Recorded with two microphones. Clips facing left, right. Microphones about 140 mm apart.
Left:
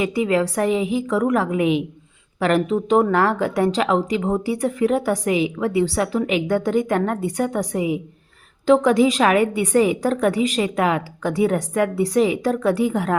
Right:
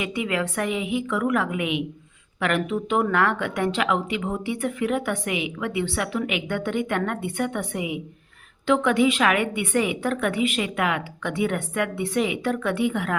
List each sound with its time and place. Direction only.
0.0 s speech: 35° left (ahead or behind)